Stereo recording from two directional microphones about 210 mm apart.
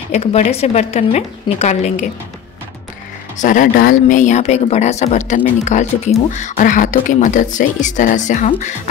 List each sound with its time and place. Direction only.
0.1 s speech: 30° left (ahead or behind)
3.3 s speech: 40° left (ahead or behind)